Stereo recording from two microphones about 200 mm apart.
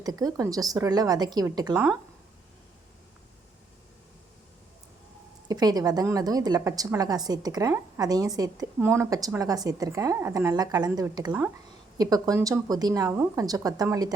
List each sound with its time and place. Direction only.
0.0 s speech: 20° right (ahead or behind)
5.5 s a woman's voice: 20° right (ahead or behind)